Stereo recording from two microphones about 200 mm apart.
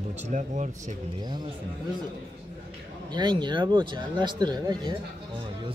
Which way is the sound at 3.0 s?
20° right (ahead or behind).